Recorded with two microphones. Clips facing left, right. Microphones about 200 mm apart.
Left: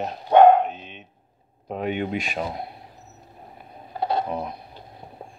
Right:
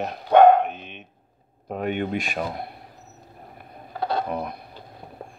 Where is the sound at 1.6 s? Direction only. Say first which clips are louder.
Even; 50° right (ahead or behind).